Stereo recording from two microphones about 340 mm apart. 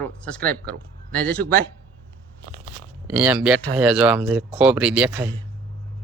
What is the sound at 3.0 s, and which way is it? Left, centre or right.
Speech, centre.